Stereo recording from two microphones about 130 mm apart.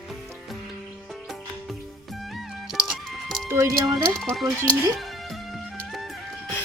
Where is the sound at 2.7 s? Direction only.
Centre (ahead or behind).